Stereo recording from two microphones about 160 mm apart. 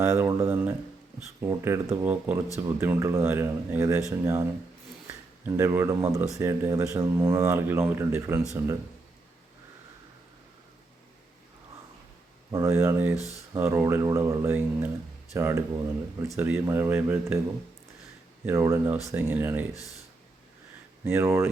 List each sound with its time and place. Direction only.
0.0 s a sound: 20° right (ahead or behind)
1.4 s speech: 15° right (ahead or behind)
5.0 s speech: 15° right (ahead or behind)
12.5 s speech: 20° right (ahead or behind)
18.4 s speech: 15° right (ahead or behind)
21.0 s speech: 15° right (ahead or behind)